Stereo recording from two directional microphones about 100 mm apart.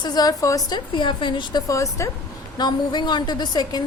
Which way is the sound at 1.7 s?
30° left (ahead or behind).